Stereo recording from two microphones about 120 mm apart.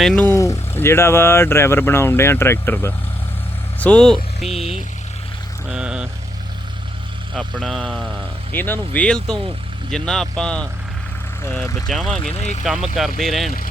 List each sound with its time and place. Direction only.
0.0 s speech: 5° left (ahead or behind)
0.3 s speech: 25° left (ahead or behind)
3.8 s speech: 10° left (ahead or behind)
5.6 s a sound: 5° right (ahead or behind)
7.3 s speech: centre (ahead or behind)
8.5 s speech: 15° left (ahead or behind)
12.3 s speech: 70° left (ahead or behind)
12.6 s speech: 5° right (ahead or behind)